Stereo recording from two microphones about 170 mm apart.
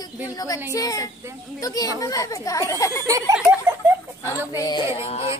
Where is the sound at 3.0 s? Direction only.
20° right (ahead or behind).